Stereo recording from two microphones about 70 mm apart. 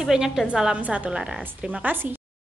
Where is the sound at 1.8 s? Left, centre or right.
Right.